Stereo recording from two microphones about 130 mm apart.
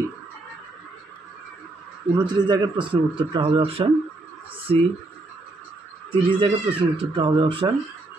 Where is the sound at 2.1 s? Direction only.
35° right (ahead or behind).